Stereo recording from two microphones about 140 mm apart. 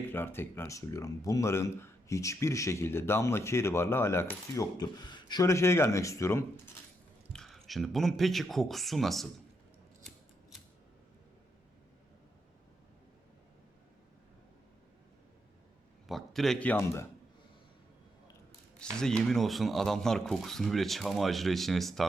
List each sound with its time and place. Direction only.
0.1 s speech: 15° left (ahead or behind)
7.3 s speech: centre (ahead or behind)
16.0 s a man's voice: centre (ahead or behind); by 17.1 s 20° left (ahead or behind)
18.8 s speech: 5° left (ahead or behind)